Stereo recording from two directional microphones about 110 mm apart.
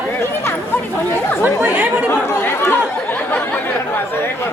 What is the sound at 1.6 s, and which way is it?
Chatter, 15° right (ahead or behind).